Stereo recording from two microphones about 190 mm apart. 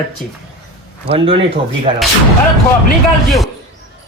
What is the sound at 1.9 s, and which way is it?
Speech, 25° right (ahead or behind).